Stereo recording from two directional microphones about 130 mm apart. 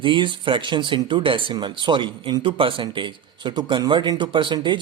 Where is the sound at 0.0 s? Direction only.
40° right (ahead or behind).